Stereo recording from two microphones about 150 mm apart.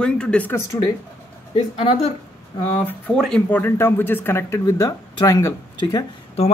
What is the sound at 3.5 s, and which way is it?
Speech, 15° left (ahead or behind).